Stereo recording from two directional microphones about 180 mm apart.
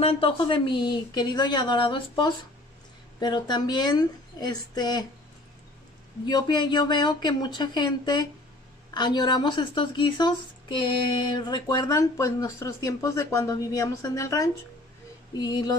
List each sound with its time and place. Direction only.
0.0 s a woman's voice: 30° left (ahead or behind)
6.2 s a woman's voice: 25° left (ahead or behind)